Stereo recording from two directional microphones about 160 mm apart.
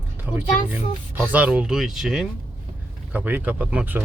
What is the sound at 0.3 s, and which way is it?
Speech, 10° right (ahead or behind).